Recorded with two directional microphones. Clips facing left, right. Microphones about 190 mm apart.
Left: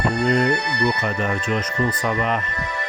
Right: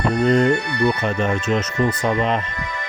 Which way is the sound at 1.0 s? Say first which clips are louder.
Right 3 dB; 25° right (ahead or behind).